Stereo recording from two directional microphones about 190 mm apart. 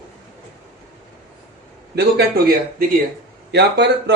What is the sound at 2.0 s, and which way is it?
A man's voice, 55° right (ahead or behind).